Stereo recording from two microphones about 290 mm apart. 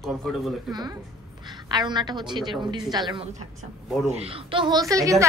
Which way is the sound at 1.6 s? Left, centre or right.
Centre.